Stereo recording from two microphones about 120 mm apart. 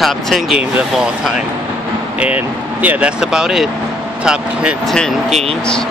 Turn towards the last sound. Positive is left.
turn(degrees=5)  # may be behind; listen again after turning